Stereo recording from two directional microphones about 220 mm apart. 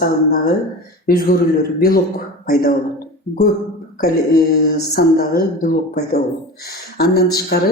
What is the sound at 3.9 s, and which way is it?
Speech, 40° left (ahead or behind).